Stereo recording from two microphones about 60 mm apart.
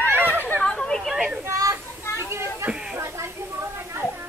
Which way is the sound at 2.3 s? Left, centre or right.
Right.